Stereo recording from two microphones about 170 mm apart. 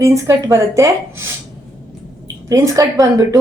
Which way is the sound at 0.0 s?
20° right (ahead or behind).